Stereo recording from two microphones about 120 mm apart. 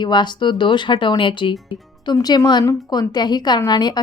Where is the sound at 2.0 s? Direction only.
35° left (ahead or behind).